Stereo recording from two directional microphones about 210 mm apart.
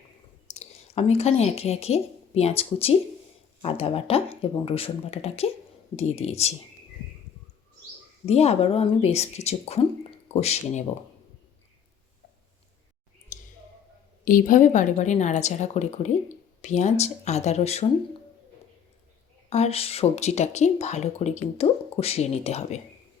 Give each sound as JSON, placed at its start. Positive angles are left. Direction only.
{"t": 0.5, "sound": "a woman's voice", "side_deg": 30}
{"t": 8.3, "sound": "speech", "side_deg": 30}
{"t": 13.3, "sound": "a sound", "side_deg": 40}
{"t": 14.3, "sound": "speech", "side_deg": 40}
{"t": 19.5, "sound": "speech", "side_deg": 30}